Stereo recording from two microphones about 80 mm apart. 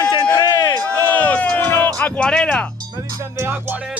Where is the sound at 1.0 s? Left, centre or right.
Left.